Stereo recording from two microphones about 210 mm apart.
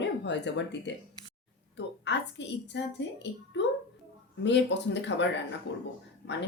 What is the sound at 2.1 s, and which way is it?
Speech, 55° left (ahead or behind).